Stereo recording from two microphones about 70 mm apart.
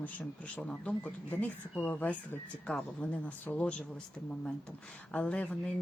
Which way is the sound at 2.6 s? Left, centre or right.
Centre.